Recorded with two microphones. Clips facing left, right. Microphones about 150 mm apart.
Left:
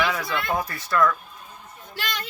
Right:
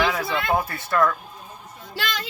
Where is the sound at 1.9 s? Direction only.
90° right.